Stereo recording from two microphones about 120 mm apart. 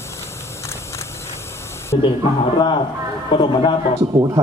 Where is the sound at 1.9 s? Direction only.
60° left (ahead or behind).